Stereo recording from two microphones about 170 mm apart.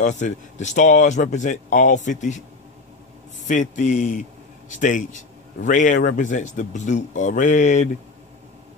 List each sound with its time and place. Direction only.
0.0 s a man's voice: 45° left (ahead or behind)
3.4 s a man's voice: 45° left (ahead or behind)